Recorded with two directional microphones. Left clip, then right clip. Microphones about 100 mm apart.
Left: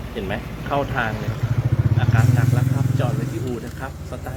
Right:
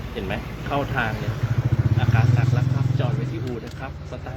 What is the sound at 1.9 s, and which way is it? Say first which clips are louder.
Vehicle: left 2 dB; 35° left (ahead or behind).